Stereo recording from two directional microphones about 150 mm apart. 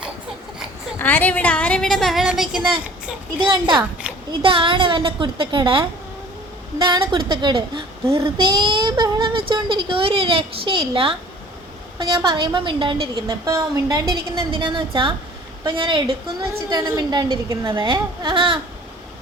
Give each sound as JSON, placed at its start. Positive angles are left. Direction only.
{"t": 0.9, "sound": "a woman's voice", "side_deg": 10}
{"t": 3.3, "sound": "a woman's voice", "side_deg": -30}